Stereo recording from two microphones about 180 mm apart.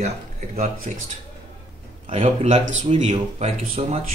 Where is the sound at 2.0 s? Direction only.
35° right (ahead or behind).